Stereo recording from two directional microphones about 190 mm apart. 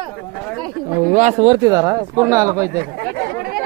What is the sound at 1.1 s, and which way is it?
Speech, 35° right (ahead or behind).